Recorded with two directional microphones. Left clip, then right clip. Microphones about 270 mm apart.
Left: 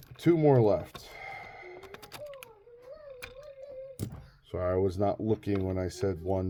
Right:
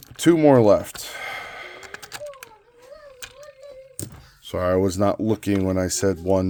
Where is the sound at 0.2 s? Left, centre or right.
Right.